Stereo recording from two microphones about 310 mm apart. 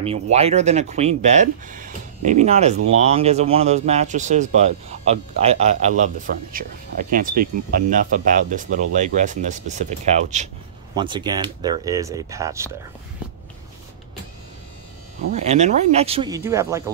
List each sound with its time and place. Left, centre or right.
0.0 s speech: centre
15.3 s speech: right